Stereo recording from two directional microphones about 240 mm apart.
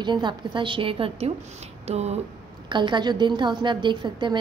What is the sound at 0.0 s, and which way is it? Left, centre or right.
A woman's voice, centre.